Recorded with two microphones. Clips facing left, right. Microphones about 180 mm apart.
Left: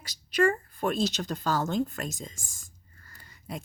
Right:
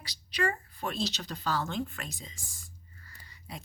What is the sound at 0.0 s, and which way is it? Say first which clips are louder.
A woman's voice: left 7 dB; 50° left (ahead or behind).